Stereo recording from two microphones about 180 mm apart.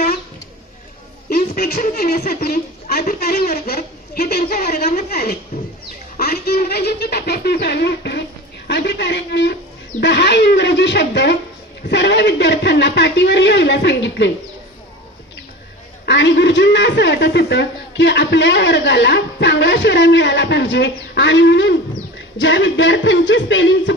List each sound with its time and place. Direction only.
1.3 s a woman's voice: 55° left (ahead or behind); by 14.3 s 70° left (ahead or behind)
16.1 s a man's voice: 75° left (ahead or behind)
22.4 s music: 90° left